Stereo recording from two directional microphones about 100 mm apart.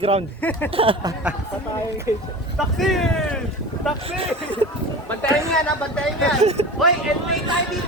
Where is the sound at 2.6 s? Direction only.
Centre (ahead or behind).